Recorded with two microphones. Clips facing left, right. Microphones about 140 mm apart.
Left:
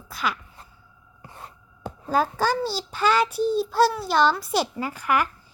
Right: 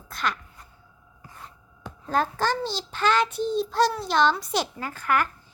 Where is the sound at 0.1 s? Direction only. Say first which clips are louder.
Left 1 dB; 5° left (ahead or behind).